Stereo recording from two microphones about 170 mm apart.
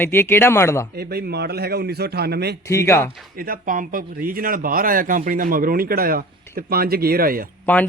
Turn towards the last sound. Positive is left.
turn(degrees=10)  # may be behind; listen again after turning